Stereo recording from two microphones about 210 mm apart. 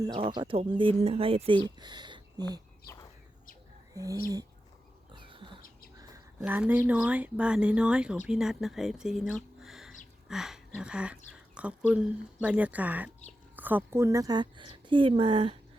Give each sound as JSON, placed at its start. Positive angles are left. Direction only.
{"t": 0.0, "sound": "speech", "side_deg": -20}
{"t": 3.9, "sound": "speech", "side_deg": -15}
{"t": 5.1, "sound": "a sound", "side_deg": -25}
{"t": 6.4, "sound": "speech", "side_deg": -5}